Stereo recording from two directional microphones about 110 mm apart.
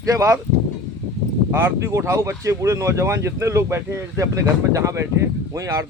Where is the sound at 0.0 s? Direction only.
30° right (ahead or behind).